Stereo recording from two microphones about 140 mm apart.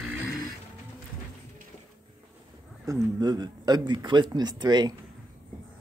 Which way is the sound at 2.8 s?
25° right (ahead or behind).